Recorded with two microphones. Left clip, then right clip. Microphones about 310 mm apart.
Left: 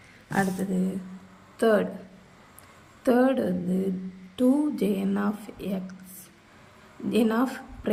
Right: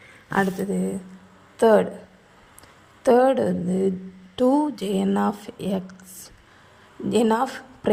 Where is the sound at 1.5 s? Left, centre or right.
Right.